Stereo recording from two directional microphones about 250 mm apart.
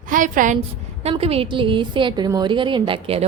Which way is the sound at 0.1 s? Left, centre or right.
Right.